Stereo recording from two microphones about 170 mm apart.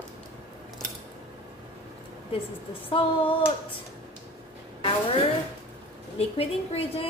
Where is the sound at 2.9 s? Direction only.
30° left (ahead or behind).